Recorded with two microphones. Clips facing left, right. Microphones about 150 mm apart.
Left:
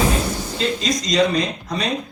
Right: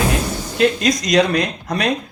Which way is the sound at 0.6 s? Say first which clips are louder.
Right 7 dB; 65° right (ahead or behind).